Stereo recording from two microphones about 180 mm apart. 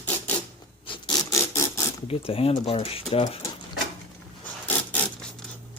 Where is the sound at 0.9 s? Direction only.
25° left (ahead or behind).